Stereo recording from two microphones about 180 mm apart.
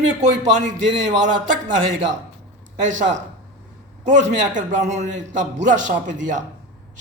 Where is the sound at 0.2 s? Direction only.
40° right (ahead or behind).